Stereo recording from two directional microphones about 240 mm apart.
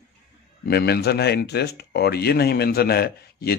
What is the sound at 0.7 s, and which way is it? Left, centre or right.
Speech, left.